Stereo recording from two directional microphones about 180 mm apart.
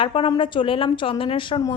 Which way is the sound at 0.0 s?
30° left (ahead or behind).